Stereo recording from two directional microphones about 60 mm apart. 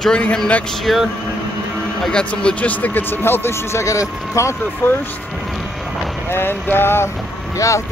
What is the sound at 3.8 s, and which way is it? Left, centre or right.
Speech, left.